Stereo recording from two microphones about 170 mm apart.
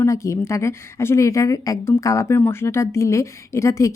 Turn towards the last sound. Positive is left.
turn(degrees=15)  # may be behind; listen again after turning